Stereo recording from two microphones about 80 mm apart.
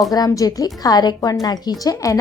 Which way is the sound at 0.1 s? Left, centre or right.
Left.